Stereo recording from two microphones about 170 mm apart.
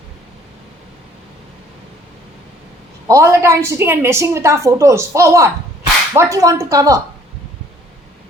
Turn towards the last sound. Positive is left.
turn(degrees=-20)  # may be behind; listen again after turning